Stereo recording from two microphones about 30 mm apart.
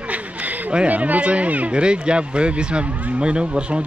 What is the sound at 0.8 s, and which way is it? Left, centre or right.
Speech, right.